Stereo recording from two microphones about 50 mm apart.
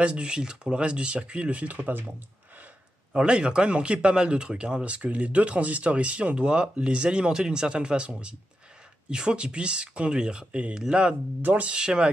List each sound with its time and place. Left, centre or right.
0.0 s speech: right
3.1 s speech: centre
11.4 s speech: right
11.7 s speech: centre